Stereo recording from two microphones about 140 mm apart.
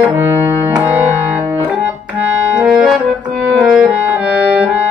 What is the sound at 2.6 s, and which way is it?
Brass instrument, 5° right (ahead or behind).